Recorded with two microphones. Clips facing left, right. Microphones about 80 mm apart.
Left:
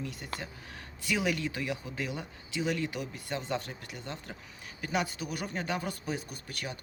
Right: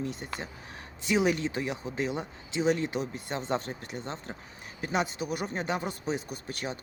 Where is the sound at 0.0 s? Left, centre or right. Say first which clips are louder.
Right 4 dB; right.